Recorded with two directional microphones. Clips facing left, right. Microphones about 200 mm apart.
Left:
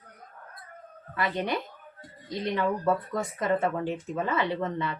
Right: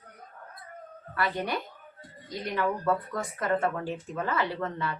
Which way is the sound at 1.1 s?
20° left (ahead or behind).